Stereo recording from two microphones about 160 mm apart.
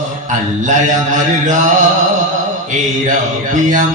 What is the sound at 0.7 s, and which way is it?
Mantra, 50° right (ahead or behind).